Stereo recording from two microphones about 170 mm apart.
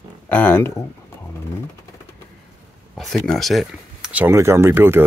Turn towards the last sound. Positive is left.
turn(degrees=-15)  # may be behind; listen again after turning